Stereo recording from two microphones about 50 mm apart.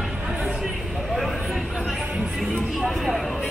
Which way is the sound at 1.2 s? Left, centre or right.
Centre.